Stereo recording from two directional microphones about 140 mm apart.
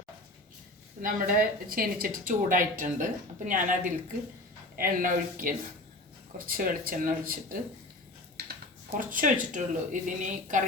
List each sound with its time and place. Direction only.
1.0 s speech: 90° right; by 3.8 s 70° right (ahead or behind)
4.8 s speech: 80° right
6.4 s speech: 90° right
9.1 s speech: 70° right (ahead or behind)